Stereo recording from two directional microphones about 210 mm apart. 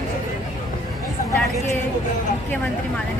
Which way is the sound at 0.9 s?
Centre (ahead or behind).